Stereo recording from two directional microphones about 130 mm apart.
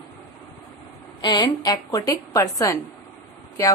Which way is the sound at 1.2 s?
35° left (ahead or behind).